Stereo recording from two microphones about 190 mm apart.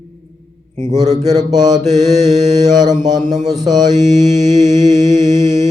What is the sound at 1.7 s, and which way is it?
Mantra, 40° right (ahead or behind).